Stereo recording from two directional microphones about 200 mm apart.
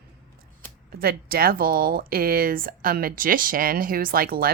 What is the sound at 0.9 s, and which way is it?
Speech, 50° right (ahead or behind).